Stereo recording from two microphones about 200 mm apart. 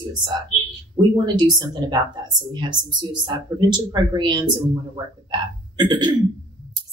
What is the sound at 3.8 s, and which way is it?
Speech, 20° right (ahead or behind).